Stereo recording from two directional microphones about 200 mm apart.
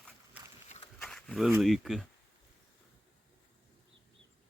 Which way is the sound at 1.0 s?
5° left (ahead or behind).